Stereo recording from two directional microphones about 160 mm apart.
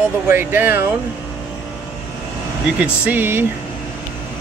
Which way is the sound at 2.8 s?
10° right (ahead or behind).